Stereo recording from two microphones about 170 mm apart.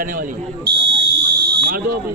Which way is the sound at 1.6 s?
60° right (ahead or behind).